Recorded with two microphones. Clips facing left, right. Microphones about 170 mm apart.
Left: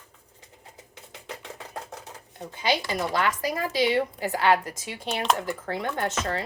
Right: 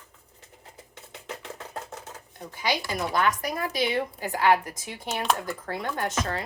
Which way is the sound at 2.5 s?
20° left (ahead or behind).